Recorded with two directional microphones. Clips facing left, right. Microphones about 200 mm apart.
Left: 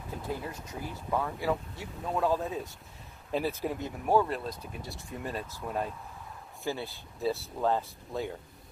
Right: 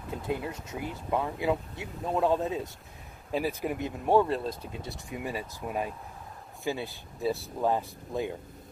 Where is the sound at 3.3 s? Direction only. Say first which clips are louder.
Right 1 dB; 10° right (ahead or behind).